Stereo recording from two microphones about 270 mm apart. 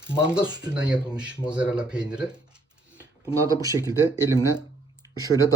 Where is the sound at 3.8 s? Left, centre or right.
Centre.